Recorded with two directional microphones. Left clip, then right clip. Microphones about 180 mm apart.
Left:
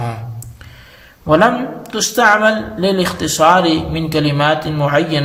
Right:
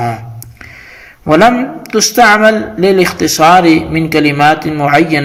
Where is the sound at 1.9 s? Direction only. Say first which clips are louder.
Right 5 dB; 25° right (ahead or behind).